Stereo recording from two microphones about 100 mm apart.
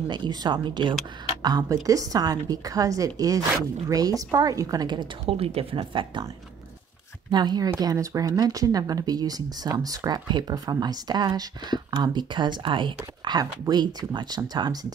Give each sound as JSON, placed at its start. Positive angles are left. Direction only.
{"t": 0.1, "sound": "speech", "side_deg": -50}
{"t": 1.7, "sound": "speech", "side_deg": -35}
{"t": 5.2, "sound": "speech", "side_deg": -85}
{"t": 7.2, "sound": "speech", "side_deg": -45}